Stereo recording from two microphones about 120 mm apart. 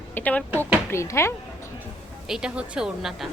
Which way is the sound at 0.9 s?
20° left (ahead or behind).